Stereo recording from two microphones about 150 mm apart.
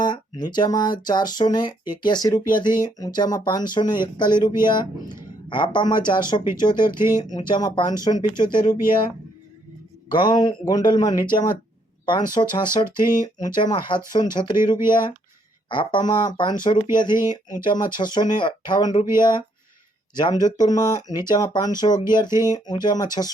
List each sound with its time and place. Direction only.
0.0 s speech: 30° left (ahead or behind)
10.1 s speech: 30° left (ahead or behind)